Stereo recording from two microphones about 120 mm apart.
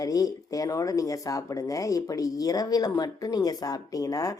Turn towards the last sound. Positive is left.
turn(degrees=30)  # may be behind; listen again after turning